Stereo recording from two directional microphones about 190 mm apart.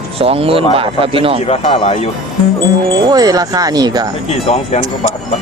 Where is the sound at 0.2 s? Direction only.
30° right (ahead or behind).